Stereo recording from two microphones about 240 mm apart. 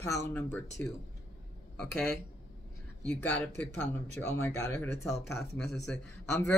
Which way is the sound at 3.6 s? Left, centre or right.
Centre.